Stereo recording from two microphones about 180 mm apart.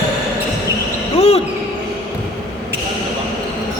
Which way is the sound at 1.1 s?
35° left (ahead or behind).